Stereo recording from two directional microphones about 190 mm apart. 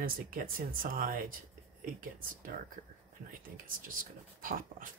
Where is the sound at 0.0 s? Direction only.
50° right (ahead or behind).